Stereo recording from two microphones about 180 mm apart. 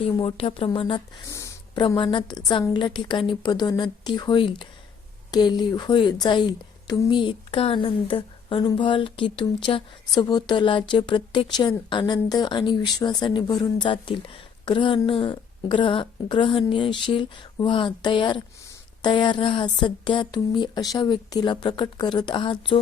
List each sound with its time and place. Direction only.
0.0 s speech: 30° left (ahead or behind)
1.3 s a woman's voice: 15° left (ahead or behind)